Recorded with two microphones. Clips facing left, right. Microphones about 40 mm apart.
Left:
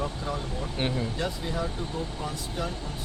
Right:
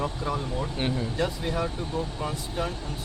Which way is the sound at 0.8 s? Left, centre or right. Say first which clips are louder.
Left 1 dB; centre.